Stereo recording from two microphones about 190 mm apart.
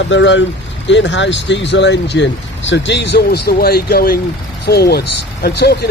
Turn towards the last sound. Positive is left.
turn(degrees=60)  # may be behind; listen again after turning